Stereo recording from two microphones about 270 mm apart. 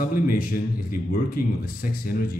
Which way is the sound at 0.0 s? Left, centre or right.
Left.